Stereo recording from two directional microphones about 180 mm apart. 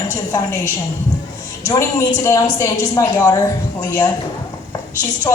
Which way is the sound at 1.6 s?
15° left (ahead or behind).